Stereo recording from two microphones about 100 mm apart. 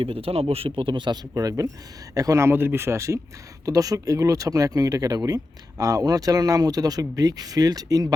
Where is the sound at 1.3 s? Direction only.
35° right (ahead or behind).